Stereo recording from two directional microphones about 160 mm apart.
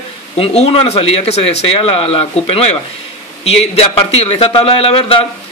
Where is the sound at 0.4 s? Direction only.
40° left (ahead or behind).